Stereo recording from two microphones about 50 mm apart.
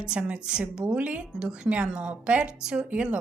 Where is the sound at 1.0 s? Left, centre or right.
Right.